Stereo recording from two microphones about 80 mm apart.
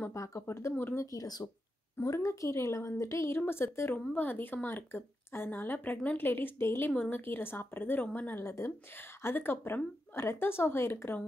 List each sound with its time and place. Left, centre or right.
0.1 s a woman's voice: left
1.0 s speech: left
2.0 s a woman's voice: left
4.0 s a woman's voice: centre
8.4 s a woman's voice: left